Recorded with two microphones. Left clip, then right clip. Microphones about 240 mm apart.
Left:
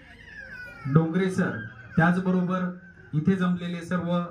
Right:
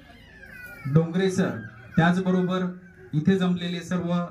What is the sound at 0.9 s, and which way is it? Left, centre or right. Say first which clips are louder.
Speech: right 1 dB; left.